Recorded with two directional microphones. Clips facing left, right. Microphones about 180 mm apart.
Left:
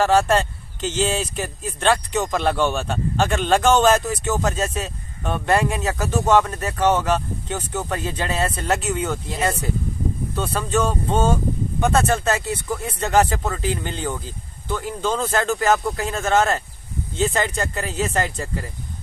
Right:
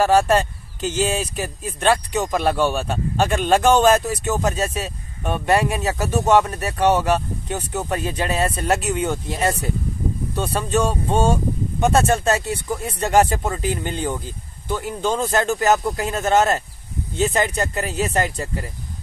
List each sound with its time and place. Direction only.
0.0 s speech: 10° right (ahead or behind)